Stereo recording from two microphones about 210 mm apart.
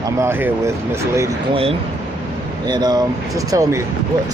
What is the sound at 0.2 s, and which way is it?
Speech, 10° right (ahead or behind).